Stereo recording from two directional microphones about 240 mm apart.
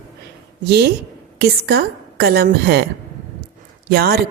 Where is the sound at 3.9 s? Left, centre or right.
Right.